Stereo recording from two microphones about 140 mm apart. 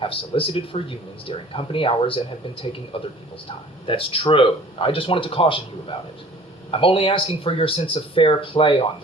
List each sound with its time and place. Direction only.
0.0 s speech: 40° left (ahead or behind)
6.7 s speech: 40° left (ahead or behind)